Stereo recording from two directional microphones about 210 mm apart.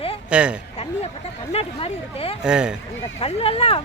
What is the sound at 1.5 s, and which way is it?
Speech, 30° left (ahead or behind).